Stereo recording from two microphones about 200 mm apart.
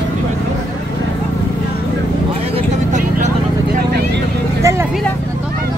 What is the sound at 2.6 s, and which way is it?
Vehicle, 40° right (ahead or behind).